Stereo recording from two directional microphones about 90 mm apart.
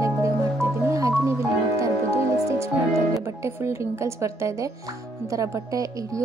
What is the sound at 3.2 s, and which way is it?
Speech, 30° right (ahead or behind).